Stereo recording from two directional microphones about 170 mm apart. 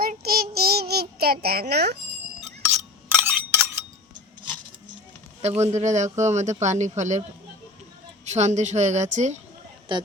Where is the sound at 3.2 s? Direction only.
10° right (ahead or behind).